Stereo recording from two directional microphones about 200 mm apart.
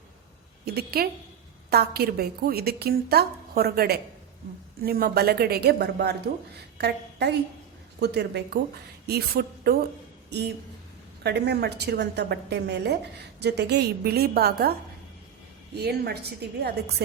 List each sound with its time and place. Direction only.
0.6 s a woman's voice: 50° right (ahead or behind)